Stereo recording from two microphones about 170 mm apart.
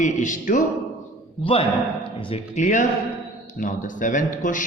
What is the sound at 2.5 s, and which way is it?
Speech, 45° left (ahead or behind).